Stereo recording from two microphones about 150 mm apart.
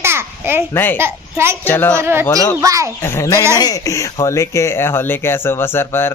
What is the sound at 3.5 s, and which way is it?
Speech, 25° left (ahead or behind).